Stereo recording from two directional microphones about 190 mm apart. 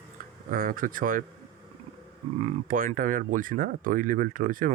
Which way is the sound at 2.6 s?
45° right (ahead or behind).